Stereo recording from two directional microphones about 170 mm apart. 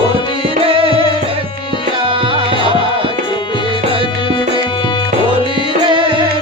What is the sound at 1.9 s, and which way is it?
Tabla, 30° right (ahead or behind).